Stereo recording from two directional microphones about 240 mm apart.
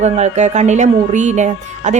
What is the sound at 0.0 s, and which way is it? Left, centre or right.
Speech, right.